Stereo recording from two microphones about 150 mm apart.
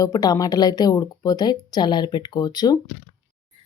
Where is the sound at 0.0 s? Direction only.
25° left (ahead or behind).